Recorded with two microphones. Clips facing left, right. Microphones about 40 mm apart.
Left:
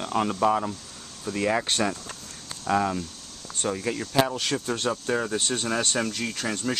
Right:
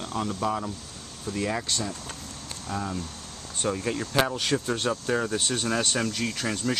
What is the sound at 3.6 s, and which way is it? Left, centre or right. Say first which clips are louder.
Speech: even; centre.